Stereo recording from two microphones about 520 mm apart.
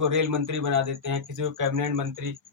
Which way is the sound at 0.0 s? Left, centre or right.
Right.